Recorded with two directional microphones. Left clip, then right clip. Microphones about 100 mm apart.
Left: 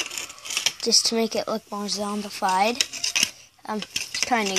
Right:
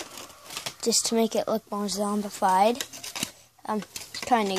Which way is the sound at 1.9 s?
50° right (ahead or behind).